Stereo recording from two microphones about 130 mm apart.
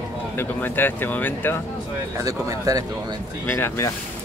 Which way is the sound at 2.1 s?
25° right (ahead or behind).